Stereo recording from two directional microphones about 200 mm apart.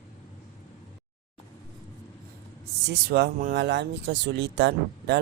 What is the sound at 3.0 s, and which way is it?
Speech, 50° right (ahead or behind).